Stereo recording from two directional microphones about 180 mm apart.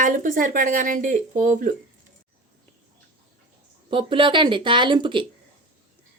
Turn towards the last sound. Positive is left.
turn(degrees=-25)  # may be behind; listen again after turning